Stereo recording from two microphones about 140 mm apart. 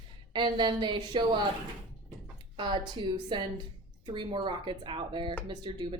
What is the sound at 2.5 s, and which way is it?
Speech, 35° right (ahead or behind).